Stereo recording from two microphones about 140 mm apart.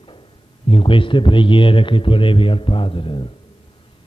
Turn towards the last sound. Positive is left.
turn(degrees=40)  # may be behind; listen again after turning